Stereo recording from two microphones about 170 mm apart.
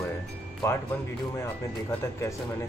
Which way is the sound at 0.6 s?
15° left (ahead or behind).